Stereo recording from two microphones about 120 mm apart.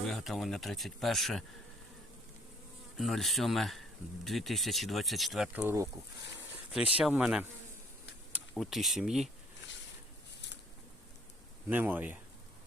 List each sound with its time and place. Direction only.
0.1 s speech: centre (ahead or behind)
3.0 s speech: centre (ahead or behind)
5.5 s speech: 20° right (ahead or behind)
6.9 s speech: 10° right (ahead or behind)
8.5 s speech: centre (ahead or behind)
11.7 s speech: 15° right (ahead or behind)